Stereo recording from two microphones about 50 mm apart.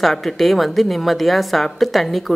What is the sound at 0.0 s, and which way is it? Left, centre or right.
A woman's voice, centre.